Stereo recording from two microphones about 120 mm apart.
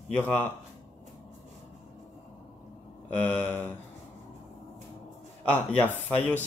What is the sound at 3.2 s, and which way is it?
Speech, 15° left (ahead or behind).